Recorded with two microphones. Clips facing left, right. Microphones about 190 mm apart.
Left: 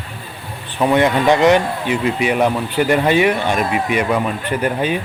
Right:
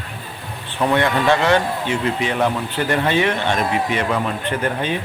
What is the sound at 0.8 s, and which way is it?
Speech, 15° left (ahead or behind).